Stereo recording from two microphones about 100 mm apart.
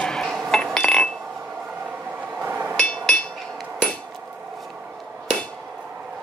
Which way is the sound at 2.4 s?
20° right (ahead or behind).